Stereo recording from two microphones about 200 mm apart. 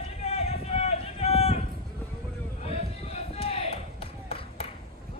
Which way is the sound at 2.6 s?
30° left (ahead or behind).